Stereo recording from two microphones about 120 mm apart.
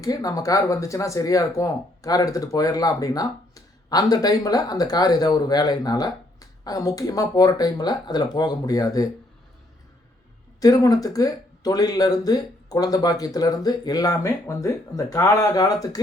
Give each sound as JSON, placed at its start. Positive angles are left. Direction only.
{"t": 0.0, "sound": "speech", "side_deg": 30}
{"t": 10.6, "sound": "speech", "side_deg": 30}